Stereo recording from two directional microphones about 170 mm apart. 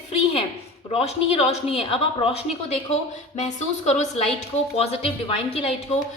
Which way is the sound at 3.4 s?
40° left (ahead or behind).